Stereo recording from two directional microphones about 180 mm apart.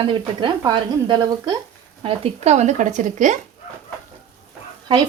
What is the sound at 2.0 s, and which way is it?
Speech, 35° right (ahead or behind).